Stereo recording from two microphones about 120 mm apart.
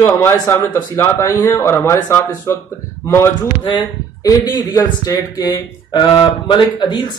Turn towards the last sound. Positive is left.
turn(degrees=40)  # may be behind; listen again after turning